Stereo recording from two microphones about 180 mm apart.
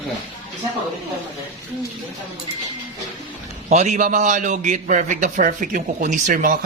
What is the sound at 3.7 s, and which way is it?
A man's voice, 40° right (ahead or behind).